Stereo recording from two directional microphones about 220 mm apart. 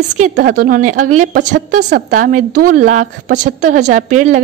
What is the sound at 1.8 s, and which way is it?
Speech, 50° right (ahead or behind).